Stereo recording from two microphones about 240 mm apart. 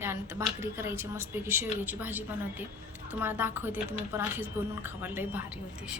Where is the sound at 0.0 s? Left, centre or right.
Centre.